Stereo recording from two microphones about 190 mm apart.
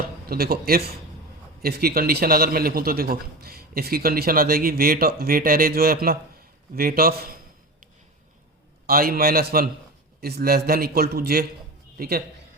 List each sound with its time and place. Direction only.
0.3 s a man's voice: 55° right (ahead or behind)
8.9 s a man's voice: 50° right (ahead or behind)